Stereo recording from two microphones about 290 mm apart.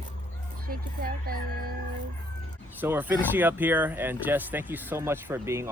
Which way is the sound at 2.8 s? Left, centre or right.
Centre.